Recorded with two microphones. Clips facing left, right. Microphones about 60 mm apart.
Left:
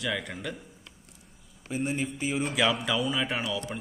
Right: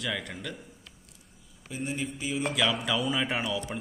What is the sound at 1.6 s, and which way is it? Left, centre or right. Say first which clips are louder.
Speech: left 4 dB; left.